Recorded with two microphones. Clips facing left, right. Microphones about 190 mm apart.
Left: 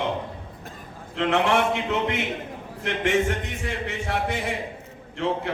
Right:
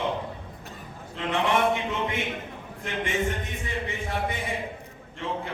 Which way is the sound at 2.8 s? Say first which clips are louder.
Left 5 dB; 75° left (ahead or behind).